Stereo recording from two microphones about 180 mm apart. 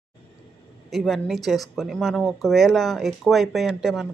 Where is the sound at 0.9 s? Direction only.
Centre (ahead or behind).